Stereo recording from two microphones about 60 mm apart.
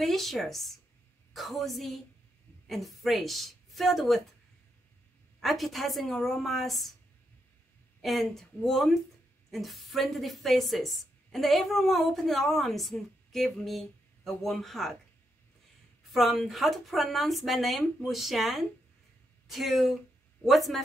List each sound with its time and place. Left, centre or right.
0.0 s a woman's voice: centre
5.4 s a woman's voice: centre
8.0 s a woman's voice: centre
16.1 s a woman's voice: centre